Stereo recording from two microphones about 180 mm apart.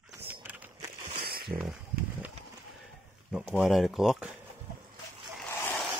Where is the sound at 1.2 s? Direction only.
60° right (ahead or behind).